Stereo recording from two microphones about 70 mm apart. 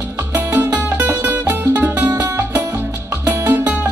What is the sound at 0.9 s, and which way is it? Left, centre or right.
Music, right.